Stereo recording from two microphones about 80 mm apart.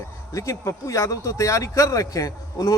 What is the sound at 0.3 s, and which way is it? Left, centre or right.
Speech, left.